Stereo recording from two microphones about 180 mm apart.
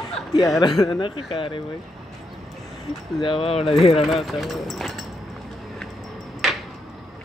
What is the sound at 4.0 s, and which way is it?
Speech, centre (ahead or behind).